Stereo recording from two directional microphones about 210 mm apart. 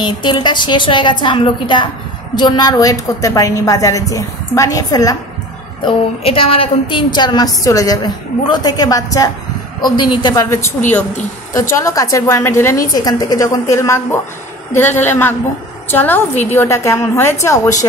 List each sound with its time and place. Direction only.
0.0 s a woman's voice: 20° left (ahead or behind)
11.8 s a woman's voice: 15° left (ahead or behind)